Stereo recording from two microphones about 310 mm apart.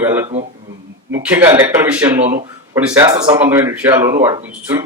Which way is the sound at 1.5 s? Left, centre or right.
Centre.